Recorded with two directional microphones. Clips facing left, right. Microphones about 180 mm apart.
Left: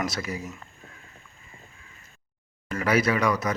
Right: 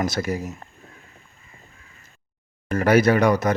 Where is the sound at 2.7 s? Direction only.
45° right (ahead or behind).